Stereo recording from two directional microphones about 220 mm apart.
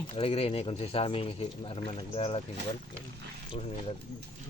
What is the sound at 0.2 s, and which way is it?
Speech, 25° left (ahead or behind).